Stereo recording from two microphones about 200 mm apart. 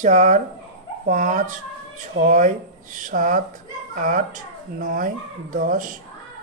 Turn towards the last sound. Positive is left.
turn(degrees=-40)  # may be behind; listen again after turning